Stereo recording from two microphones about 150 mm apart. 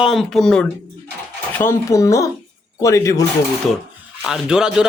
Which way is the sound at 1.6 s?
20° left (ahead or behind).